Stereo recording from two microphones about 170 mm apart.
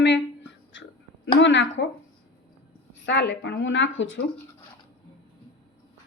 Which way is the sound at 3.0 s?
90° left.